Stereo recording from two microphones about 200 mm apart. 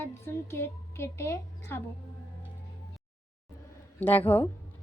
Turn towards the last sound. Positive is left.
turn(degrees=10)  # may be behind; listen again after turning